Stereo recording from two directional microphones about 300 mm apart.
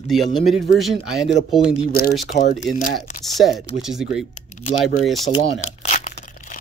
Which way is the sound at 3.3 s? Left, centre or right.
Centre.